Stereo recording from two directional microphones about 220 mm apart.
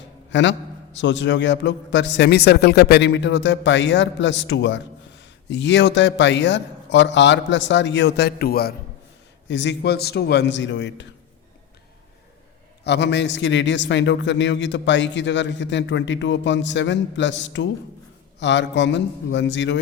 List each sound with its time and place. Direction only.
0.3 s a man's voice: 55° left (ahead or behind)
12.8 s a man's voice: 50° left (ahead or behind)